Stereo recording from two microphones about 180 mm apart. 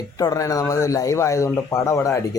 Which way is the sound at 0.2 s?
20° left (ahead or behind).